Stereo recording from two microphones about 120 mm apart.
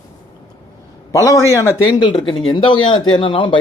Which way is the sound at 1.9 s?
40° left (ahead or behind).